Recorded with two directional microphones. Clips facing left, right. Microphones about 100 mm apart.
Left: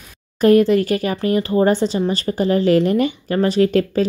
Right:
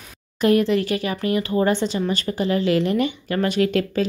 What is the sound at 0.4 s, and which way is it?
Speech, 40° left (ahead or behind).